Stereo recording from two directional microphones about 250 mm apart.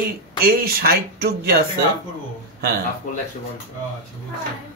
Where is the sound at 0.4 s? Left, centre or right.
Right.